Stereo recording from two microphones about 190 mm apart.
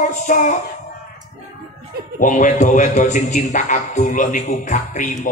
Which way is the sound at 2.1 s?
40° left (ahead or behind).